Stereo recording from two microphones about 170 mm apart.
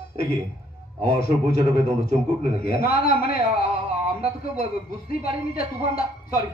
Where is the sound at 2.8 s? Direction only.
60° left (ahead or behind).